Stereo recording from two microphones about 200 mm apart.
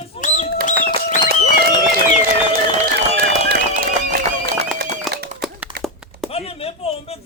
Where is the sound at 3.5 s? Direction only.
45° right (ahead or behind).